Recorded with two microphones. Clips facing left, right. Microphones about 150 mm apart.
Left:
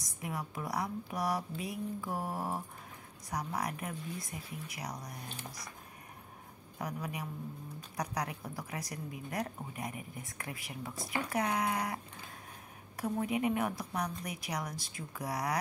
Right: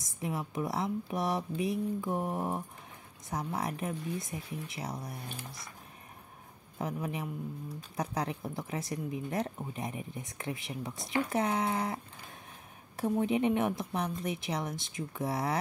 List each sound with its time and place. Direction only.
0.2 s a woman's voice: 25° right (ahead or behind)
6.8 s a woman's voice: 25° right (ahead or behind)